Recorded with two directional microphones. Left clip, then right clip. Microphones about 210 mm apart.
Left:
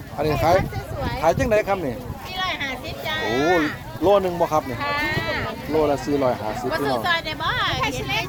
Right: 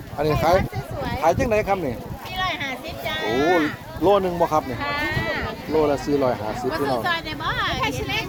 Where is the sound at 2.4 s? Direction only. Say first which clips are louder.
Even; 5° left (ahead or behind).